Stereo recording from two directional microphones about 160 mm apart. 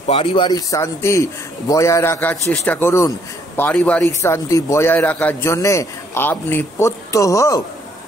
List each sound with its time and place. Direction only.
0.1 s a man's voice: 35° left (ahead or behind)
0.5 s a man's voice: 20° left (ahead or behind)